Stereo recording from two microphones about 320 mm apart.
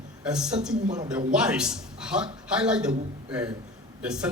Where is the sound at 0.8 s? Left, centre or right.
Right.